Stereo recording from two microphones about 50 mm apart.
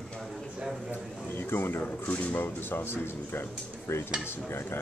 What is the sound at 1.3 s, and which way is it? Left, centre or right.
Speech, left.